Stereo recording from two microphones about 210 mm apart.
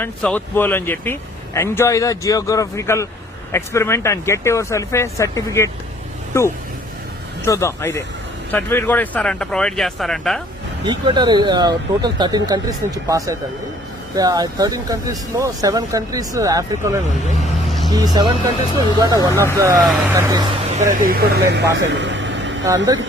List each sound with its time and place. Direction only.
0.0 s speech: 5° left (ahead or behind)
10.8 s speech: 20° right (ahead or behind)
21.0 s speech: 45° right (ahead or behind)
21.8 s vehicle: 60° right (ahead or behind)